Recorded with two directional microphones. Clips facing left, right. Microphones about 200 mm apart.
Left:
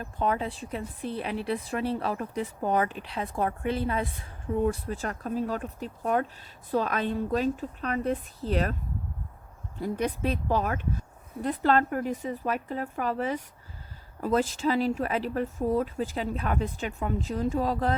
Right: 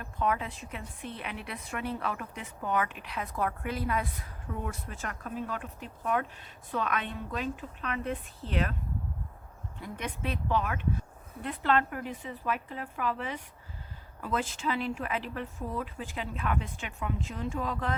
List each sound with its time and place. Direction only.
0.0 s speech: 30° left (ahead or behind)
9.7 s speech: 35° left (ahead or behind)